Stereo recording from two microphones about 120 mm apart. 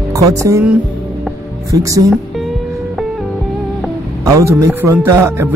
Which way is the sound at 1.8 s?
30° right (ahead or behind).